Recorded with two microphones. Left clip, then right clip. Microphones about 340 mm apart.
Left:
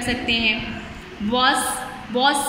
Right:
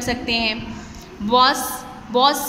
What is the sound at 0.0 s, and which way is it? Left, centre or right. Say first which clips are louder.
A woman's voice: left 1 dB; right.